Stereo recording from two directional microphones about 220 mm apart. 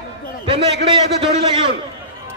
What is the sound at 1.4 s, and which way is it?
Speech, 25° right (ahead or behind).